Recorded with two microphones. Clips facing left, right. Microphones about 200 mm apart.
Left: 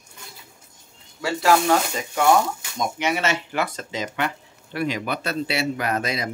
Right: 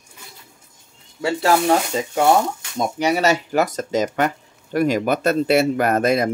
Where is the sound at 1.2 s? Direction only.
30° right (ahead or behind).